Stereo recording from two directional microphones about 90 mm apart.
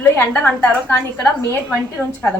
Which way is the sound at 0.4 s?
25° left (ahead or behind).